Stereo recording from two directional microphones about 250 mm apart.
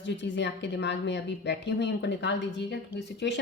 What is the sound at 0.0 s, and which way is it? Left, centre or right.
A woman's voice, left.